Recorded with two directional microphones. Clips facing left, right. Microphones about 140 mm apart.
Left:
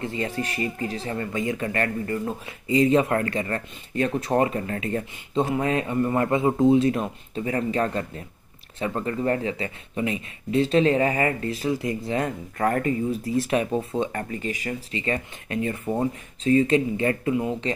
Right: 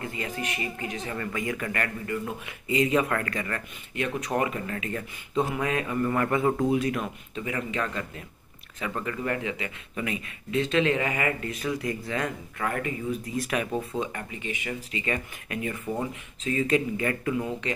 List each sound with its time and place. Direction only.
0.0 s speech: 30° left (ahead or behind)
12.6 s speech: 40° left (ahead or behind)
14.1 s speech: 40° left (ahead or behind)